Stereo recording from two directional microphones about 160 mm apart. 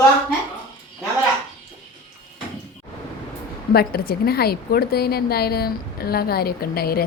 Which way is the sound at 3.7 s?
75° left (ahead or behind).